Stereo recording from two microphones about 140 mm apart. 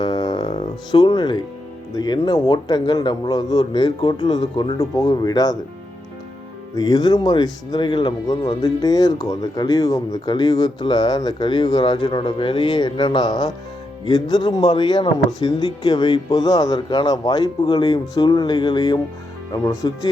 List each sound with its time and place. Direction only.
0.0 s a sound: 30° left (ahead or behind)
2.0 s a man's voice: 30° left (ahead or behind)
6.7 s a man's voice: 30° left (ahead or behind)